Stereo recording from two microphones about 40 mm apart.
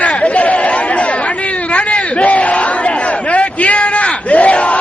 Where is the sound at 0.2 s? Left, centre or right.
Left.